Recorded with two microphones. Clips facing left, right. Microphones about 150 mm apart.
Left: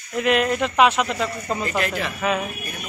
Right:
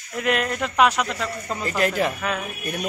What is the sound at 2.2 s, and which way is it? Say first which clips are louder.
Speech: left 4 dB; 5° left (ahead or behind).